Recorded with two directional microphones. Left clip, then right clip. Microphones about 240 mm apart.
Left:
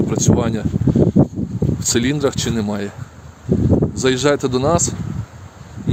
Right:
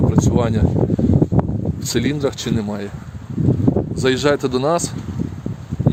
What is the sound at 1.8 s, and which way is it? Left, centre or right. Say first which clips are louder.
Speech: left 2 dB; centre.